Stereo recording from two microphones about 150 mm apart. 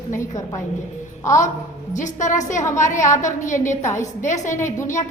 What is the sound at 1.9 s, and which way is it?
Speech, 55° left (ahead or behind).